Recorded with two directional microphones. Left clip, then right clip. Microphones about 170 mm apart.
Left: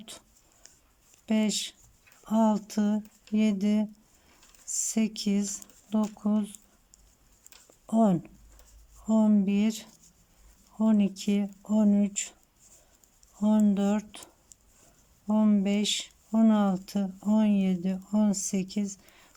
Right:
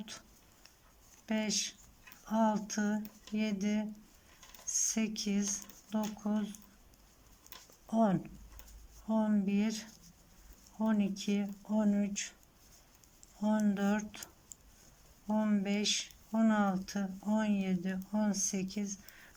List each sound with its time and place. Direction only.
1.3 s speech: 20° left (ahead or behind)
7.9 s speech: 20° left (ahead or behind)
13.4 s speech: 20° left (ahead or behind)
15.3 s speech: 20° left (ahead or behind)